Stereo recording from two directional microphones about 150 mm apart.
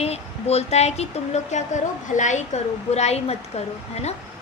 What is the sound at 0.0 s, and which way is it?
Speech, 45° left (ahead or behind).